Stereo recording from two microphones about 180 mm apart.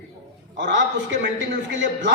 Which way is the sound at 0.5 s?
80° right.